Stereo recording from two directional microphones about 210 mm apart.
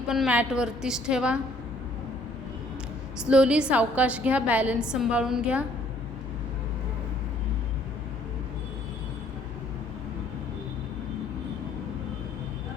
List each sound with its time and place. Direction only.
0.1 s a woman's voice: 5° right (ahead or behind)
3.2 s a woman's voice: 5° right (ahead or behind)